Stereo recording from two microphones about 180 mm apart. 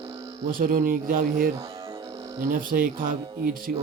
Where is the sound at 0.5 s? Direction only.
55° right (ahead or behind).